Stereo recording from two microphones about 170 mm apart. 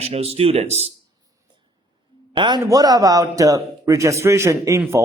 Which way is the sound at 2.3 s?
25° right (ahead or behind).